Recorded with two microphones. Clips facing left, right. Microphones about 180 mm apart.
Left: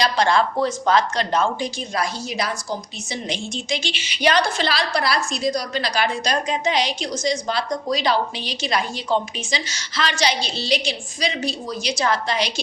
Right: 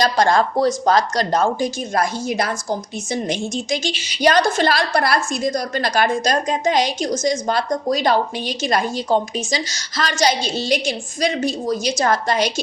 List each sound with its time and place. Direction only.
0.0 s speech: 45° right (ahead or behind)